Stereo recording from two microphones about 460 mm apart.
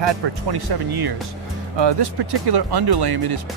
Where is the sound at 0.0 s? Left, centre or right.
Right.